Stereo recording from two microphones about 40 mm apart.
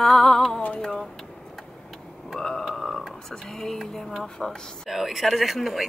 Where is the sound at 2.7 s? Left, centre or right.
Centre.